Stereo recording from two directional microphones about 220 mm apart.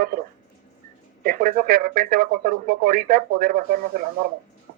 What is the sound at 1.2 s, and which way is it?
Speech, 40° right (ahead or behind).